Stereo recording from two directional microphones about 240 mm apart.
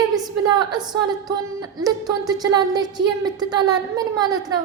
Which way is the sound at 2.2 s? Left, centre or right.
Centre.